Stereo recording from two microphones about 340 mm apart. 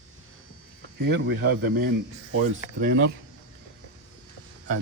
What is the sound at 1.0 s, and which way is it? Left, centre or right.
Speech, right.